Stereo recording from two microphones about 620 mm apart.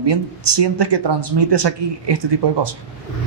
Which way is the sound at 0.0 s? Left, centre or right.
Right.